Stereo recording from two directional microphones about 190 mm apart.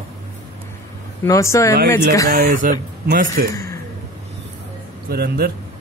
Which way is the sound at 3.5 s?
15° left (ahead or behind).